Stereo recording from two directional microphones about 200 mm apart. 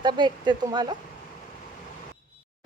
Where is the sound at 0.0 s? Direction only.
20° right (ahead or behind).